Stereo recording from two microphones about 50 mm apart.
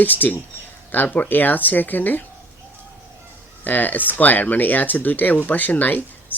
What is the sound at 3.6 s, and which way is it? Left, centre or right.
Speech, left.